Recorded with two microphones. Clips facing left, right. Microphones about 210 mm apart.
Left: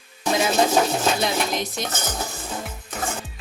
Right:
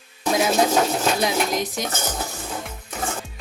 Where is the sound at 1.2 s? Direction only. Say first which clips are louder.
Right 2 dB; 10° right (ahead or behind).